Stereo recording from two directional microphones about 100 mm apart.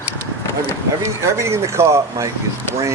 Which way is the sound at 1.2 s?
30° right (ahead or behind).